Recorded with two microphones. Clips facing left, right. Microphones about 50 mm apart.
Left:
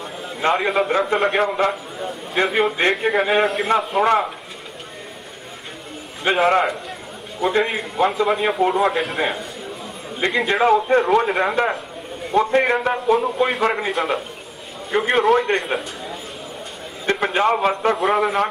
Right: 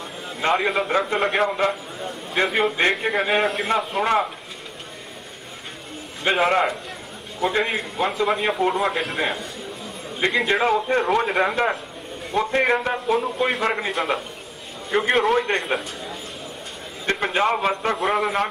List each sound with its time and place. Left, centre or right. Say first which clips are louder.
0.4 s a man's voice: left 2 dB; centre
6.2 s a man's voice: left 2 dB; centre